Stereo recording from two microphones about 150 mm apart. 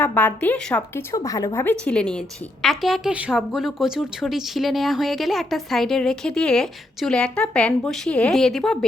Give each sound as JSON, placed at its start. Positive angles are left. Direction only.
{"t": 0.0, "sound": "a woman's voice", "side_deg": 10}
{"t": 1.1, "sound": "speech", "side_deg": 20}
{"t": 1.8, "sound": "a woman's voice", "side_deg": 5}